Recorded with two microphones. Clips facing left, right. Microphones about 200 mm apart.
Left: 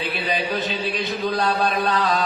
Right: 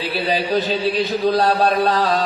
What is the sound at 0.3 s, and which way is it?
A man's voice, 35° right (ahead or behind).